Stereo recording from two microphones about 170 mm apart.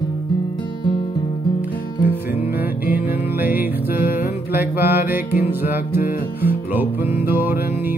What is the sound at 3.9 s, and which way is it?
Music, 60° left (ahead or behind).